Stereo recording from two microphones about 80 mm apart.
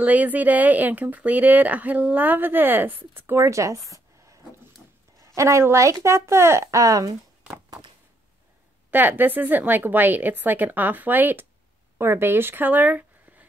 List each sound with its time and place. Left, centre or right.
0.0 s a woman's voice: centre; by 7.2 s right
8.9 s speech: right